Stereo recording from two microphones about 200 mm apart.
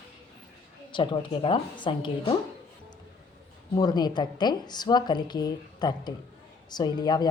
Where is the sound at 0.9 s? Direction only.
25° left (ahead or behind).